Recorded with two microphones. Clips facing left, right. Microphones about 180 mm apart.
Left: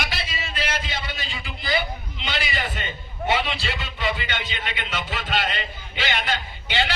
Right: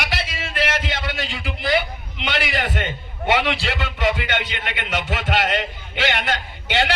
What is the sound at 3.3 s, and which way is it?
Music, 90° right.